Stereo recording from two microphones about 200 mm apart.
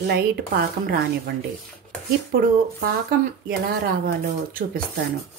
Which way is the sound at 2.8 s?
45° right (ahead or behind).